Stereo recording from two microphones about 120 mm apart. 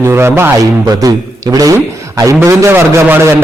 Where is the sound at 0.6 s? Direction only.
30° right (ahead or behind).